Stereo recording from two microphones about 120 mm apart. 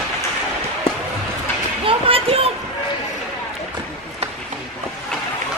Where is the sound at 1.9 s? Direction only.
50° right (ahead or behind).